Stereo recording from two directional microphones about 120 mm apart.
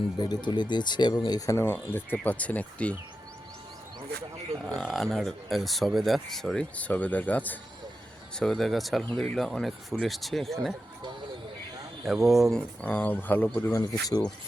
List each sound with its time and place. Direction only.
0.2 s speech: 35° left (ahead or behind); by 2.9 s 10° left (ahead or behind)
4.6 s speech: centre (ahead or behind)
8.4 s speech: centre (ahead or behind)
12.0 s speech: centre (ahead or behind)
12.8 s speech: 15° left (ahead or behind)
13.7 s speech: 30° left (ahead or behind)